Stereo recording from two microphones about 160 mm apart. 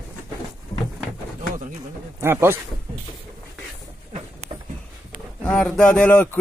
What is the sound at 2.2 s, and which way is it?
Speech, 15° right (ahead or behind).